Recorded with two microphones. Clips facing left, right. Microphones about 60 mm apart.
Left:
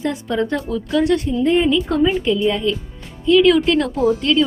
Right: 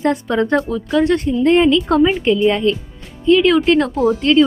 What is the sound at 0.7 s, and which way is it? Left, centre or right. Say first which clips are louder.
Speech: right 2 dB; right.